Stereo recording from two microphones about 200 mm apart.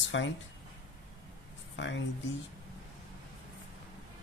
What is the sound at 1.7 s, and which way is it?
Speech, 65° left (ahead or behind).